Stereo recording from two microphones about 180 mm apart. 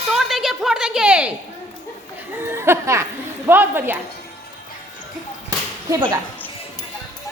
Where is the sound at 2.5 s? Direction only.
15° right (ahead or behind).